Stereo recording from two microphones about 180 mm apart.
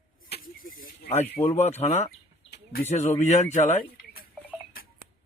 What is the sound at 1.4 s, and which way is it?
Speech, 35° left (ahead or behind).